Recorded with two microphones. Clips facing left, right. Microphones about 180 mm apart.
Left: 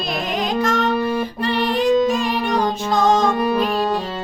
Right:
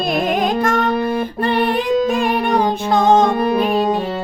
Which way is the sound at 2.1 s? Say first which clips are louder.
Right 3 dB; 55° right (ahead or behind).